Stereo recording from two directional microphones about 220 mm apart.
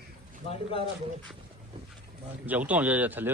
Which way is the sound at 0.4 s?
25° left (ahead or behind).